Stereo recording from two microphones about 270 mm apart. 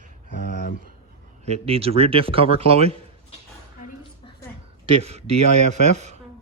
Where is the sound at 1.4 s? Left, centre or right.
Right.